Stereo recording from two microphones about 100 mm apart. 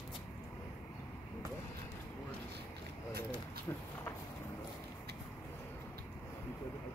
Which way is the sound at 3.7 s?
35° left (ahead or behind).